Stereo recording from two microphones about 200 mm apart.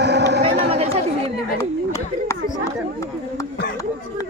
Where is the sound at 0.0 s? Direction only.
55° right (ahead or behind).